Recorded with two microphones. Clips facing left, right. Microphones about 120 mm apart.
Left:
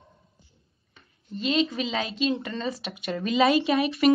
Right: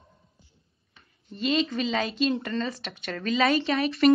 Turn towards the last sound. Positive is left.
turn(degrees=5)  # may be behind; listen again after turning